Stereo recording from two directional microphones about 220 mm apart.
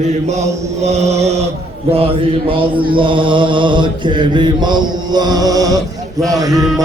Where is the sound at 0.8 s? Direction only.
30° right (ahead or behind).